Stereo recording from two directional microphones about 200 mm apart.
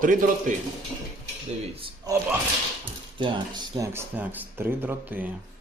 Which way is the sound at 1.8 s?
15° right (ahead or behind).